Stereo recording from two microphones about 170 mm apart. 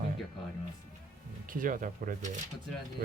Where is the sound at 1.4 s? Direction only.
55° right (ahead or behind).